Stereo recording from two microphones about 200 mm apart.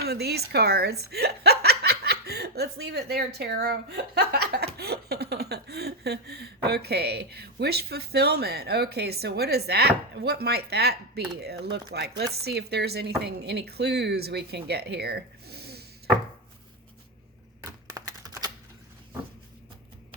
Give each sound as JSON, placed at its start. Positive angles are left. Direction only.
{"t": 0.0, "sound": "speech", "side_deg": -55}
{"t": 17.6, "sound": "typewriter", "side_deg": -20}